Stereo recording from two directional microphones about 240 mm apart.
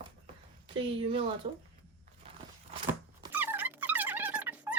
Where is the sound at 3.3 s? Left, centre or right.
Centre.